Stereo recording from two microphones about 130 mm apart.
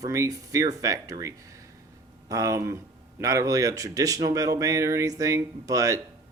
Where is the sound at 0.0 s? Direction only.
25° right (ahead or behind).